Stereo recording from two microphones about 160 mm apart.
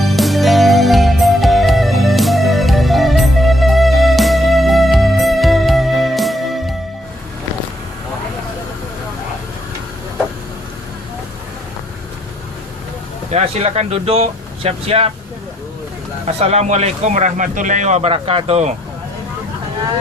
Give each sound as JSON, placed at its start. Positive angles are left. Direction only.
{"t": 0.0, "sound": "music", "side_deg": 0}
{"t": 13.3, "sound": "speech", "side_deg": -40}
{"t": 16.2, "sound": "speech", "side_deg": -45}